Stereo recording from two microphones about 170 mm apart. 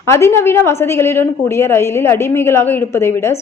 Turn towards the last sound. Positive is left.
turn(degrees=15)  # may be behind; listen again after turning